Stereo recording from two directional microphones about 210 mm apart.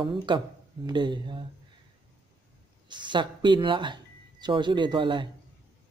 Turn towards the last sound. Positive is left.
turn(degrees=-20)  # may be behind; listen again after turning